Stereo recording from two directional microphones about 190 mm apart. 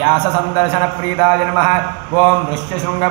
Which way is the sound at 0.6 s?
30° left (ahead or behind).